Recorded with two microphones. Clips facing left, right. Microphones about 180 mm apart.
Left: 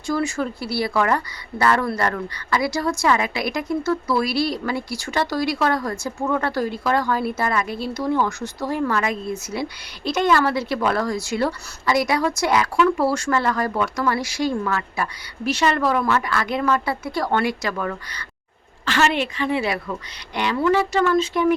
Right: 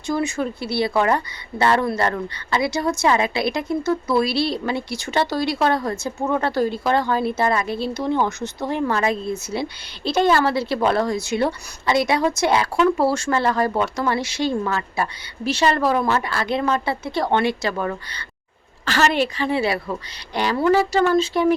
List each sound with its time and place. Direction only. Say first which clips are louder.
0.1 s a woman's voice: even; 20° right (ahead or behind)
18.9 s a woman's voice: right 1 dB; 40° right (ahead or behind)